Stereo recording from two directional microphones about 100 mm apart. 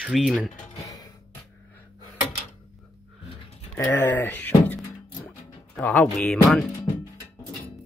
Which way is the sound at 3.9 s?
20° left (ahead or behind).